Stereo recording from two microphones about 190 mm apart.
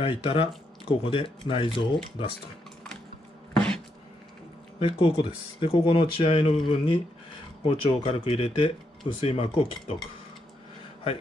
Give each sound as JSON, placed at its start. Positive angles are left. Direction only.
{"t": 0.0, "sound": "speech", "side_deg": 30}
{"t": 3.5, "sound": "a sound", "side_deg": 5}
{"t": 4.7, "sound": "speech", "side_deg": 30}